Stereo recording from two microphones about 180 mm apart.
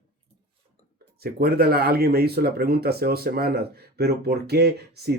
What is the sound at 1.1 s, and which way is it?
Speech, 60° right (ahead or behind).